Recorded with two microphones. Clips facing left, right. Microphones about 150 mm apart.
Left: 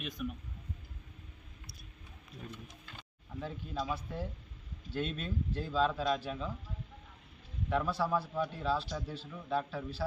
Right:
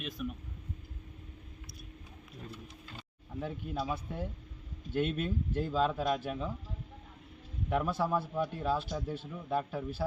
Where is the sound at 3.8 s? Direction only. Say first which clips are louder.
Even; 20° right (ahead or behind).